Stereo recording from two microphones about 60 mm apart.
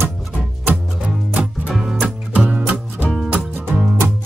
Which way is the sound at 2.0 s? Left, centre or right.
Centre.